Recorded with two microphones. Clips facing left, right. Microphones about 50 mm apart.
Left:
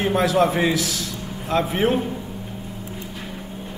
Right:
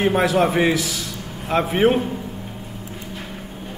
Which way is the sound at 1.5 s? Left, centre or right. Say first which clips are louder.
Right 3 dB; centre.